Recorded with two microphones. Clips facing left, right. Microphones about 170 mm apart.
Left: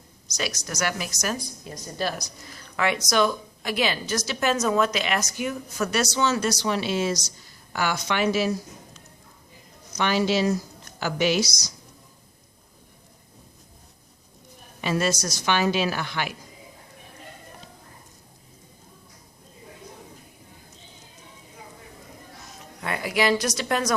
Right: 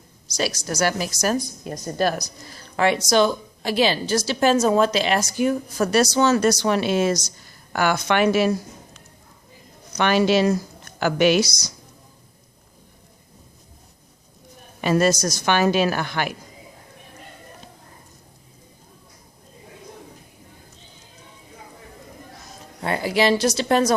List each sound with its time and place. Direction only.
0.3 s speech: 30° right (ahead or behind)
1.6 s a woman's voice: 50° right (ahead or behind)
14.8 s a woman's voice: 45° right (ahead or behind)
22.8 s speech: 30° right (ahead or behind)